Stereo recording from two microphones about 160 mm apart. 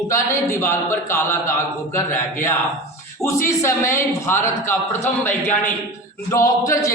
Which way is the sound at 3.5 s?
15° left (ahead or behind).